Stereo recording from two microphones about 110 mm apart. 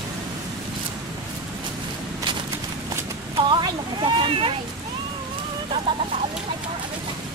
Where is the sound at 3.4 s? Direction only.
45° right (ahead or behind).